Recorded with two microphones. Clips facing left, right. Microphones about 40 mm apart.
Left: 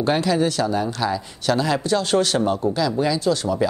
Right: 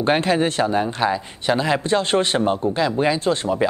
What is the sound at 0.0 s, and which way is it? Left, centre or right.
Speech, right.